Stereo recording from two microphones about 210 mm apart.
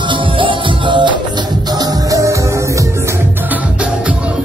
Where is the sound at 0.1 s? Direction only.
25° right (ahead or behind).